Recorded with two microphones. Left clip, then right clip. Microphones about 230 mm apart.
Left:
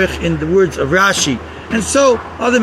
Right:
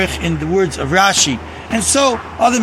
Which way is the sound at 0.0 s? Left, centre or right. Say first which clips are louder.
Left 2 dB; right.